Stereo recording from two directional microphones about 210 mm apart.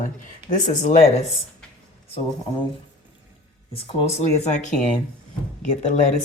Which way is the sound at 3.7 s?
25° left (ahead or behind).